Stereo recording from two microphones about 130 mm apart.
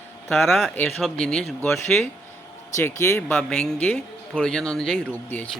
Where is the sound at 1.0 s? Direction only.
5° left (ahead or behind).